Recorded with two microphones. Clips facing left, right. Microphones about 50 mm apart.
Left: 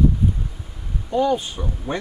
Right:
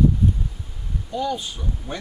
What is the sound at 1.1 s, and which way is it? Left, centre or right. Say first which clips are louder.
Speech: left 6 dB; left.